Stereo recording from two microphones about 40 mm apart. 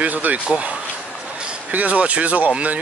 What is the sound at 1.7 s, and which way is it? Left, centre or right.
Speech, right.